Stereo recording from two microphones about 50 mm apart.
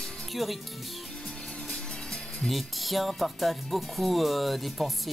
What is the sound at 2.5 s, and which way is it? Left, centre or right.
Speech, centre.